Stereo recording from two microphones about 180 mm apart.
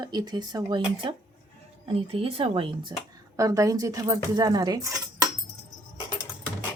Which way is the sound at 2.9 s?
20° right (ahead or behind).